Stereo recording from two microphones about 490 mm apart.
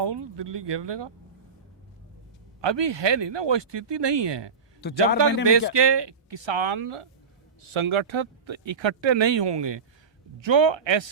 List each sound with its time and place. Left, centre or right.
0.0 s speech: right
2.6 s speech: right